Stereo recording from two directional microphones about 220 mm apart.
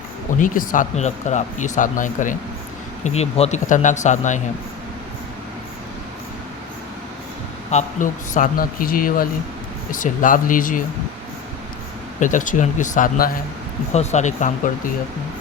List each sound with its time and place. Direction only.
0.3 s speech: 35° left (ahead or behind)
7.7 s speech: 35° left (ahead or behind)
12.2 s speech: 35° left (ahead or behind)